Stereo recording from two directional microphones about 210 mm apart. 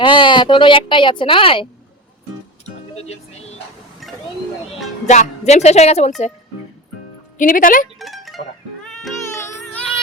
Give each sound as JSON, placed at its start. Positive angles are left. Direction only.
{"t": 0.0, "sound": "a woman's voice", "side_deg": 25}
{"t": 2.6, "sound": "music", "side_deg": 30}
{"t": 4.0, "sound": "a sound", "side_deg": 0}
{"t": 5.0, "sound": "speech", "side_deg": 35}
{"t": 7.3, "sound": "speech", "side_deg": 40}
{"t": 7.9, "sound": "mandolin", "side_deg": 0}